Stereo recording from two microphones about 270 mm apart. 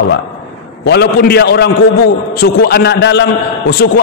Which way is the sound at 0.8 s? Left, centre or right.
Left.